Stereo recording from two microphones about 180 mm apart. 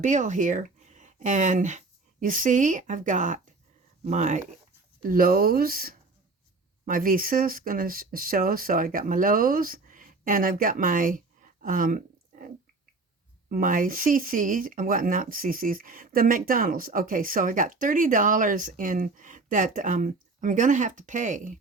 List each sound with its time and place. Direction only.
0.0 s speech: 40° right (ahead or behind)
5.0 s speech: 50° right (ahead or behind)
11.6 s a sound: 50° right (ahead or behind)
13.5 s speech: 50° right (ahead or behind)